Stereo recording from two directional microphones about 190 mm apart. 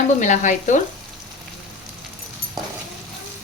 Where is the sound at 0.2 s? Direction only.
40° left (ahead or behind).